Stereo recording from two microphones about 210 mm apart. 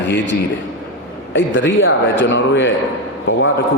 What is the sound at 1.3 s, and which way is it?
A man's voice, 60° left (ahead or behind).